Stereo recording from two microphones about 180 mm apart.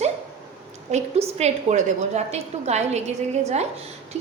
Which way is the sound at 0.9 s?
40° right (ahead or behind).